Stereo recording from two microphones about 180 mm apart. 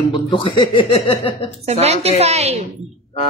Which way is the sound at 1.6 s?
35° right (ahead or behind).